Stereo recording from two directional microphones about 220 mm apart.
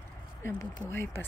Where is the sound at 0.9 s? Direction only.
10° left (ahead or behind).